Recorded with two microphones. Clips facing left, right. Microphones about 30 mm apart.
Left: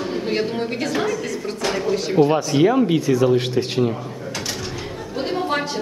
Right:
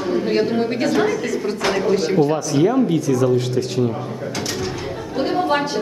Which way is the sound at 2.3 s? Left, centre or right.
Left.